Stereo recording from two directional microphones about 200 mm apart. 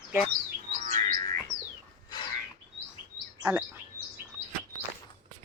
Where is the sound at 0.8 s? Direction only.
40° right (ahead or behind).